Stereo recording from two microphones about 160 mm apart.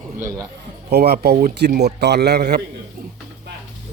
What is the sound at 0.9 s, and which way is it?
A man's voice, 85° right.